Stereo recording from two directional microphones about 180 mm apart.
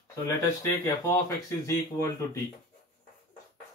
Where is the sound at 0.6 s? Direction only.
15° left (ahead or behind).